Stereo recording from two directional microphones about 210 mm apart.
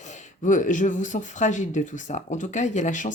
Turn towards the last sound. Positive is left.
turn(degrees=35)  # may be behind; listen again after turning